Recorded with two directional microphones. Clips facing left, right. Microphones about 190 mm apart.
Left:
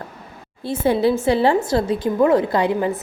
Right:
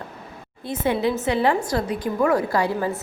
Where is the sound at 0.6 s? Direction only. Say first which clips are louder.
Left 4 dB; 30° left (ahead or behind).